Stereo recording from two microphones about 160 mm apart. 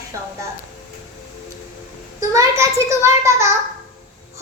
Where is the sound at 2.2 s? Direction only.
20° right (ahead or behind).